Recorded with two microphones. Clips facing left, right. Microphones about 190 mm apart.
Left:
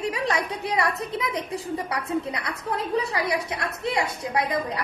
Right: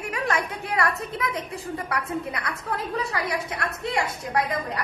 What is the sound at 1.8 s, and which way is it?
A woman's voice, 20° left (ahead or behind).